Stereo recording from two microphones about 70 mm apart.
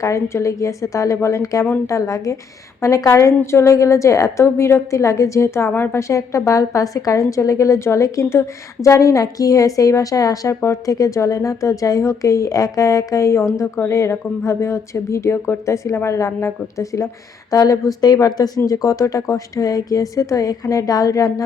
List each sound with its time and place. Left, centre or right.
0.0 s a woman's voice: left
6.0 s a woman's voice: left
10.5 s a woman's voice: left